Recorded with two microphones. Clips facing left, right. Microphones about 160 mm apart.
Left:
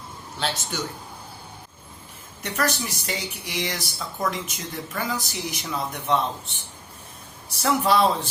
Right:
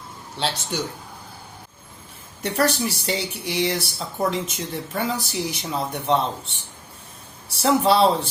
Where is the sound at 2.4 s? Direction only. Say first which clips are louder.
Right 5 dB; 30° right (ahead or behind).